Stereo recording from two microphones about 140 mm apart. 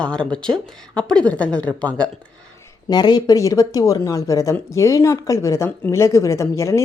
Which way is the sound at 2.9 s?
30° left (ahead or behind).